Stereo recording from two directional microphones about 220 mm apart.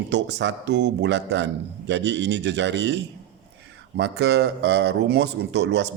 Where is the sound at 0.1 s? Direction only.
50° right (ahead or behind).